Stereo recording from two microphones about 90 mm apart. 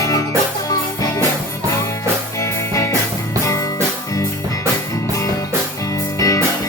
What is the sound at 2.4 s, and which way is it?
Music, 35° left (ahead or behind).